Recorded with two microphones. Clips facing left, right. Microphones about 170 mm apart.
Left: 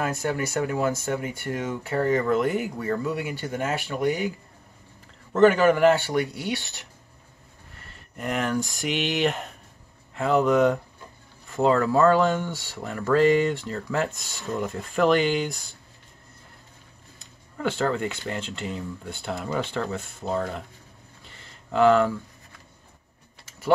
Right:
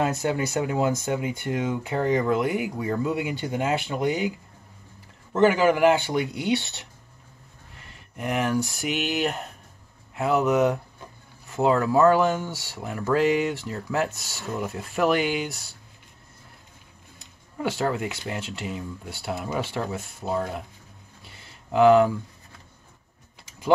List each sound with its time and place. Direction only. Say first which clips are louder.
0.0 s speech: right 2 dB; 20° right (ahead or behind)
5.3 s speech: left 2 dB; 10° right (ahead or behind)
7.8 s speech: right 1 dB; 15° right (ahead or behind)
17.6 s speech: left 1 dB; 10° right (ahead or behind)
21.2 s a sound: right 1 dB; 10° right (ahead or behind)